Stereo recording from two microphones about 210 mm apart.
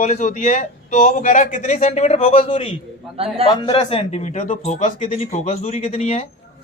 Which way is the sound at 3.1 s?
30° right (ahead or behind).